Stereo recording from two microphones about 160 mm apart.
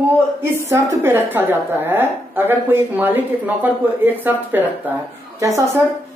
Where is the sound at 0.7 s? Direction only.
15° right (ahead or behind).